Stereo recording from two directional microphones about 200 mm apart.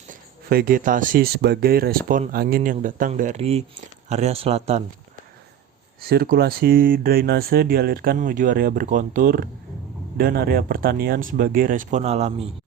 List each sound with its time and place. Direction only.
0.1 s speech: 45° right (ahead or behind)
6.0 s speech: 50° right (ahead or behind); by 12.5 s 30° right (ahead or behind)